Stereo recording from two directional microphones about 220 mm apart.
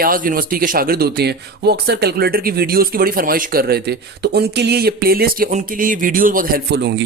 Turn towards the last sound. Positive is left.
turn(degrees=-50)  # may be behind; listen again after turning